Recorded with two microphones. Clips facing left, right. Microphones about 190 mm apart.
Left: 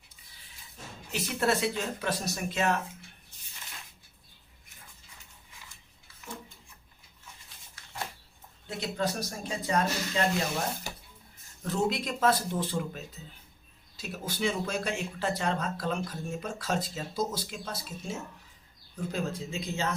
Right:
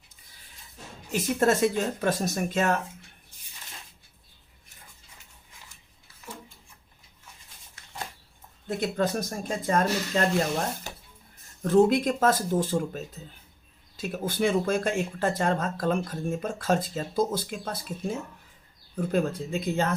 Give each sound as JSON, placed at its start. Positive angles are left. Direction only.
{"t": 1.1, "sound": "speech", "side_deg": -45}
{"t": 8.6, "sound": "speech", "side_deg": -50}
{"t": 11.6, "sound": "speech", "side_deg": -50}
{"t": 18.9, "sound": "speech", "side_deg": -55}